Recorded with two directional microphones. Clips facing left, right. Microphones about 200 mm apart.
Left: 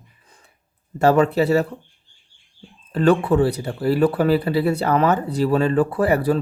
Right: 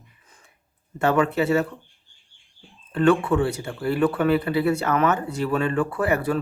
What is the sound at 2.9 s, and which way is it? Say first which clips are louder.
Speech: left 2 dB; 35° left (ahead or behind).